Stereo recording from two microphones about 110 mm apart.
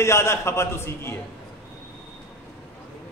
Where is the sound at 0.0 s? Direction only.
25° left (ahead or behind).